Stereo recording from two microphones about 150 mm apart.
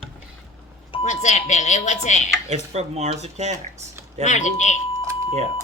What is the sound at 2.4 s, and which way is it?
Speech, 45° right (ahead or behind).